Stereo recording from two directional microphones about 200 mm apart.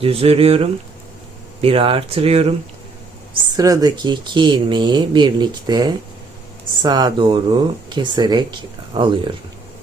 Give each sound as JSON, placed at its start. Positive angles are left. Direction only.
{"t": 0.0, "sound": "speech", "side_deg": -30}
{"t": 3.5, "sound": "speech", "side_deg": -20}